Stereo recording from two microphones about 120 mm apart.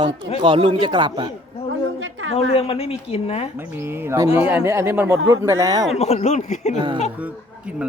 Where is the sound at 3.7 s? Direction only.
20° right (ahead or behind).